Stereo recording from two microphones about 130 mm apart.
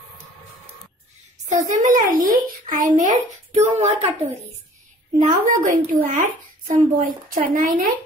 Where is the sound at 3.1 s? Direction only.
60° right (ahead or behind).